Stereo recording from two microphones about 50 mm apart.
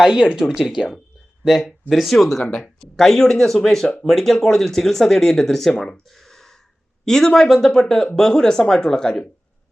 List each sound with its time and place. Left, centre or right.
0.0 s speech: centre
0.4 s speech: centre
1.9 s speech: centre
2.4 s speech: centre